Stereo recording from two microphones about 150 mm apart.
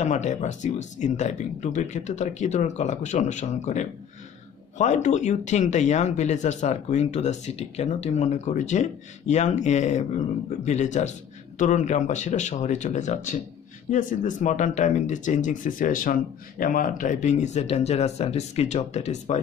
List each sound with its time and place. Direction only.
0.0 s speech: 55° left (ahead or behind)